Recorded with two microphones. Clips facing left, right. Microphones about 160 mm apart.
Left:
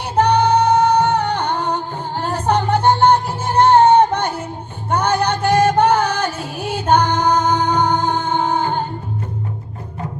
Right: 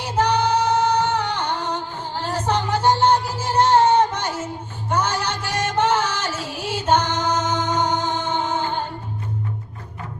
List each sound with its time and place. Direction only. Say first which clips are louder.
0.0 s music: left 5 dB; 55° left (ahead or behind)